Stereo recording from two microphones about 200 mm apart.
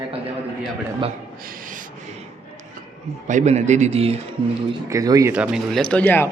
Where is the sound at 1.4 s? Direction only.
45° right (ahead or behind).